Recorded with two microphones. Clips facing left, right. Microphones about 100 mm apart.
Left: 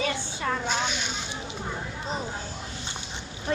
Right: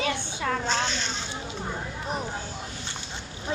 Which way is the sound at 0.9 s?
10° left (ahead or behind).